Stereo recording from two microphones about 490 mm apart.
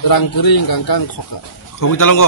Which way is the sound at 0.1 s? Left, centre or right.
Left.